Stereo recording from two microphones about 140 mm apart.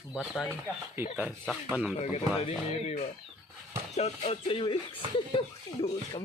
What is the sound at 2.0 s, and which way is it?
Speech, 45° left (ahead or behind).